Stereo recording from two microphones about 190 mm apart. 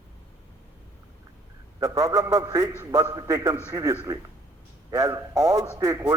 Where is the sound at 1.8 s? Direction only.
15° right (ahead or behind).